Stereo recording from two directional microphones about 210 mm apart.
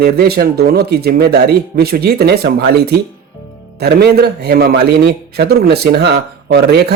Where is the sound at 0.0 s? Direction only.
50° right (ahead or behind).